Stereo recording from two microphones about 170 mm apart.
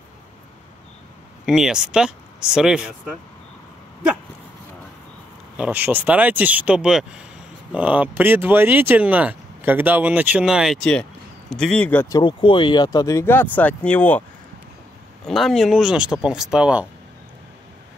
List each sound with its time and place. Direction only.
1.4 s speech: centre (ahead or behind)
5.6 s speech: 10° right (ahead or behind); by 12.2 s 10° left (ahead or behind)
12.2 s speech: 30° left (ahead or behind); by 14.2 s 10° left (ahead or behind)
15.2 s speech: centre (ahead or behind)